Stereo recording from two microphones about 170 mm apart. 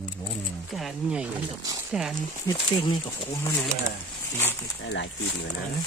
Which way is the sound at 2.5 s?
25° left (ahead or behind).